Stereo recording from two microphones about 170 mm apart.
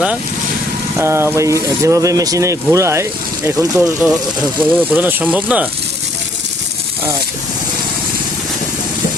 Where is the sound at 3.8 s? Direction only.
5° right (ahead or behind).